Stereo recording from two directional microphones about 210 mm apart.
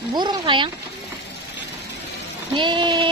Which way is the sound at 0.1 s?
20° right (ahead or behind).